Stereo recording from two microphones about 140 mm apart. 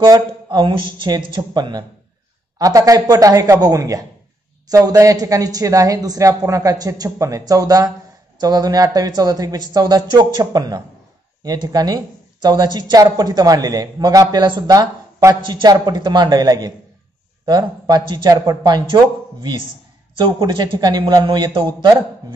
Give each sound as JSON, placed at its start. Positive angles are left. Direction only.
{"t": 0.0, "sound": "speech", "side_deg": -30}
{"t": 20.2, "sound": "speech", "side_deg": -30}